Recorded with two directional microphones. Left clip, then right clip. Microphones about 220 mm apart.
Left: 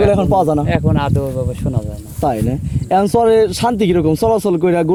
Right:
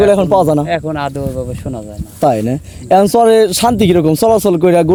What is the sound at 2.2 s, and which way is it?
A man's voice, 50° right (ahead or behind).